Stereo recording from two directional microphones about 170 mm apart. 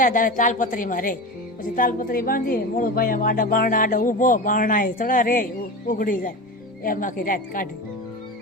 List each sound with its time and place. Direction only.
0.0 s a woman's voice: 50° left (ahead or behind)